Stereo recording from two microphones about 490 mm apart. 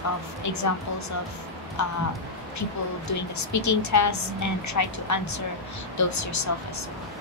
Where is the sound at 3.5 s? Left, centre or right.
Left.